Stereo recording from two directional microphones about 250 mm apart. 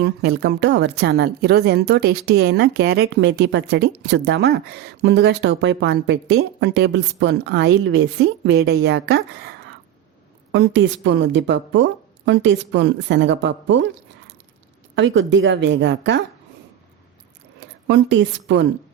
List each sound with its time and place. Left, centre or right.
0.0 s a woman's voice: right
14.9 s a woman's voice: right
17.8 s a woman's voice: right